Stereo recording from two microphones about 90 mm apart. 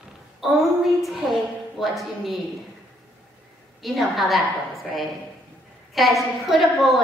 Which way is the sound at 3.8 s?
Centre (ahead or behind).